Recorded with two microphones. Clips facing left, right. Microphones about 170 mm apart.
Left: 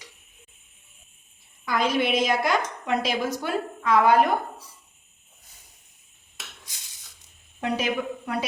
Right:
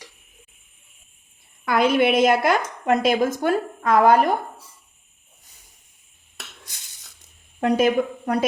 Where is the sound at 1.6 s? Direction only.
60° right (ahead or behind); by 4.2 s 45° right (ahead or behind).